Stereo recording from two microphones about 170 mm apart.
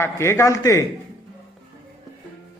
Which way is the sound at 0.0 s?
15° left (ahead or behind).